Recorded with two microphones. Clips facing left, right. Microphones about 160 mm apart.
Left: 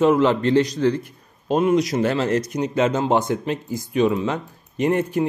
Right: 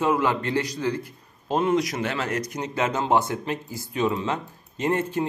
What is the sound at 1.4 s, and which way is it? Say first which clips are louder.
Speech: left 4 dB; 20° left (ahead or behind).